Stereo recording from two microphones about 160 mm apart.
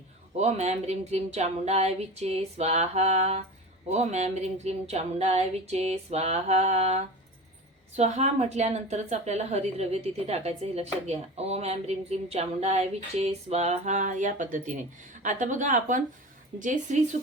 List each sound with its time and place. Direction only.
0.3 s a woman's voice: 45° right (ahead or behind)